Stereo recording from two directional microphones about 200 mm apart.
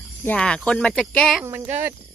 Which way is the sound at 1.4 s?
10° right (ahead or behind).